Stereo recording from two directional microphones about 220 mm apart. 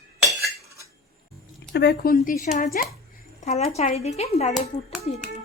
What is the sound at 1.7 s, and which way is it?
A woman's voice, 50° left (ahead or behind).